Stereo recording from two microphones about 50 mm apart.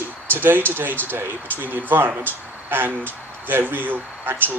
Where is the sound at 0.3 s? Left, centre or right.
Right.